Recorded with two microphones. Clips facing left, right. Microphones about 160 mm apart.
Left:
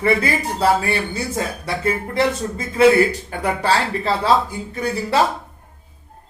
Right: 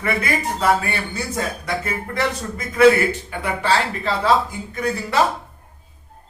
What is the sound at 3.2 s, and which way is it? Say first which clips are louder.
Speech: left 2 dB; 40° left (ahead or behind).